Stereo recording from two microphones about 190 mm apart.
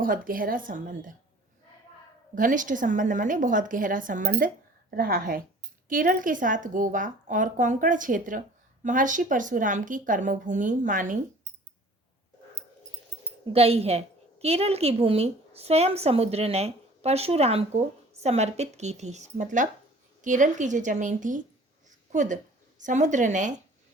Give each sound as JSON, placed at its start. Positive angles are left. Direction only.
{"t": 0.0, "sound": "a woman's voice", "side_deg": -45}
{"t": 2.3, "sound": "a woman's voice", "side_deg": -45}
{"t": 13.4, "sound": "a woman's voice", "side_deg": -30}
{"t": 21.8, "sound": "a sound", "side_deg": -40}
{"t": 22.8, "sound": "a woman's voice", "side_deg": -40}